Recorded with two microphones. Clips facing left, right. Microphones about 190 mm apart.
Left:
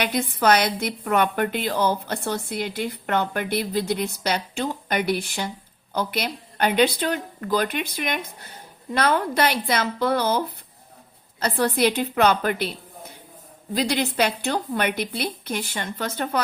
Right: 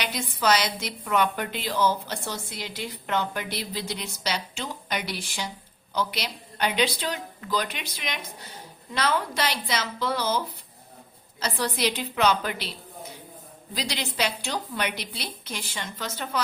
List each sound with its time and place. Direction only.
0.0 s a woman's voice: 55° left (ahead or behind)
13.7 s a woman's voice: 55° left (ahead or behind)